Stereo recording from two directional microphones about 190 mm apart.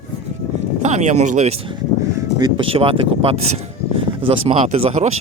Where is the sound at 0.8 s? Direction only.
35° right (ahead or behind).